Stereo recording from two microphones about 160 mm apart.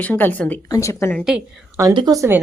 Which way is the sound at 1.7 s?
25° right (ahead or behind).